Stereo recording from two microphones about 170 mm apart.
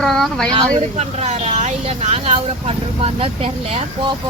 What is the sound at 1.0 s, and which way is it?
Speech, 40° right (ahead or behind).